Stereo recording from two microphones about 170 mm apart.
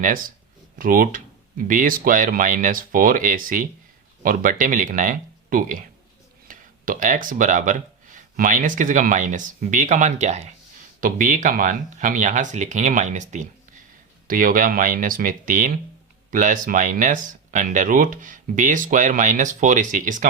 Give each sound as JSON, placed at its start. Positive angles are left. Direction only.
{"t": 0.0, "sound": "speech", "side_deg": -55}